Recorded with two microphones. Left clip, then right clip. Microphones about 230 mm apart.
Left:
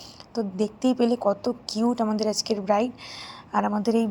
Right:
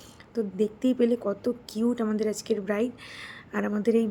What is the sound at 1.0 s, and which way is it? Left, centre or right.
A woman's voice, right.